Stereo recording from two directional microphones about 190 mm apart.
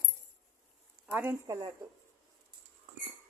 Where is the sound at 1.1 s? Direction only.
10° right (ahead or behind).